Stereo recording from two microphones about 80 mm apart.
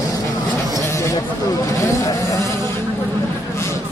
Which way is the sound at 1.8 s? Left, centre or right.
Left.